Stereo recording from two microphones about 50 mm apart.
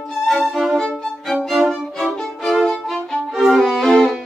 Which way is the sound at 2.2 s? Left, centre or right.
Centre.